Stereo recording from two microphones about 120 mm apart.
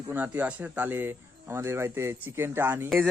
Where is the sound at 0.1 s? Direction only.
15° right (ahead or behind).